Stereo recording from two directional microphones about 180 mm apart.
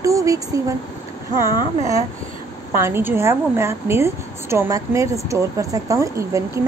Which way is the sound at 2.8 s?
15° right (ahead or behind).